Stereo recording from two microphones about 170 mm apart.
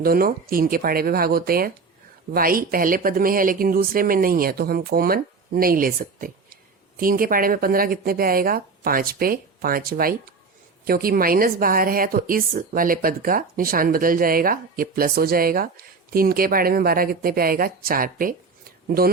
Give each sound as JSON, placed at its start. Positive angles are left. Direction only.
{"t": 0.0, "sound": "a woman's voice", "side_deg": -60}